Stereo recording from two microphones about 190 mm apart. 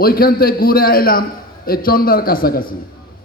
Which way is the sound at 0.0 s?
50° left (ahead or behind).